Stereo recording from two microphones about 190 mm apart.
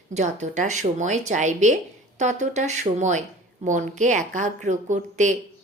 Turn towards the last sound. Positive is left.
turn(degrees=-40)  # may be behind; listen again after turning